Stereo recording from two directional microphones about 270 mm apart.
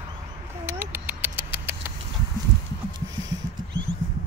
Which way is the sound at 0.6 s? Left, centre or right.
Centre.